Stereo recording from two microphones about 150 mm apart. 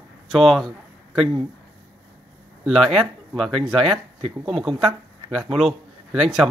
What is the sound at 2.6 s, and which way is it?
Speech, centre (ahead or behind).